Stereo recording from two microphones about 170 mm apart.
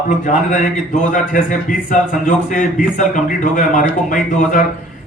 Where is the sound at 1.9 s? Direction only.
50° left (ahead or behind).